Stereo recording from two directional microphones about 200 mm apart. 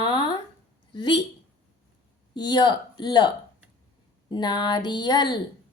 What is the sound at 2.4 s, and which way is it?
Speech, 20° left (ahead or behind).